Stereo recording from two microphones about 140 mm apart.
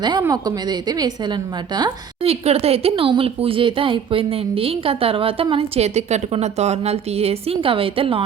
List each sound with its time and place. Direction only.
0.0 s a woman's voice: 30° right (ahead or behind)
2.2 s speech: 45° right (ahead or behind)